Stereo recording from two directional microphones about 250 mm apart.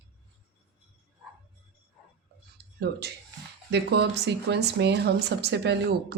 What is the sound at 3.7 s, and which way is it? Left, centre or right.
Speech, right.